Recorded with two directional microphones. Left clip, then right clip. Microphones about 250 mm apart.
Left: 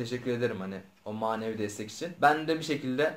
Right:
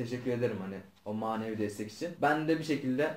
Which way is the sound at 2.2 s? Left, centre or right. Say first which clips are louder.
Left 4 dB; centre.